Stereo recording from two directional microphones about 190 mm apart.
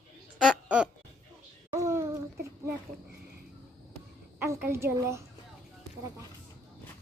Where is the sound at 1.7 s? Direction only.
15° right (ahead or behind).